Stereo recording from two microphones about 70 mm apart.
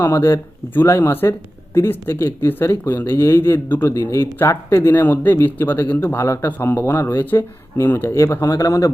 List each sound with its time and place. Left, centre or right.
0.0 s speech: left
6.1 s speech: left
8.4 s speech: left